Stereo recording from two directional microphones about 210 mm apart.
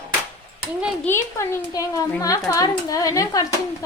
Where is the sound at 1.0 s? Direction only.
10° left (ahead or behind).